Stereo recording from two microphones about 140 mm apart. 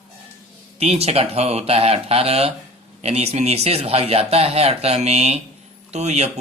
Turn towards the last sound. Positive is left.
turn(degrees=-50)  # may be behind; listen again after turning